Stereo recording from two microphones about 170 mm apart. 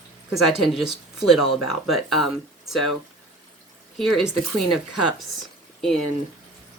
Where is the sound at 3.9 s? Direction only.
Centre (ahead or behind).